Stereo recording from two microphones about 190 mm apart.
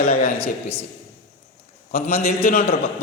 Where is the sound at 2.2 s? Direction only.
50° left (ahead or behind).